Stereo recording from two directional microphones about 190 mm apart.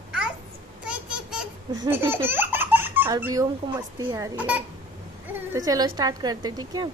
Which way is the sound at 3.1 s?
20° right (ahead or behind).